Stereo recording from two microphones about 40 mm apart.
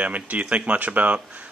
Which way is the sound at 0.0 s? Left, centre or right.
Right.